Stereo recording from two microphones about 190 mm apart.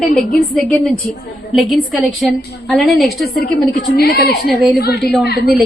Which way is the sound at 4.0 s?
55° left (ahead or behind).